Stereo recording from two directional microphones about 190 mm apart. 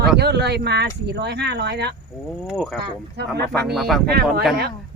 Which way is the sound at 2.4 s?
Centre (ahead or behind).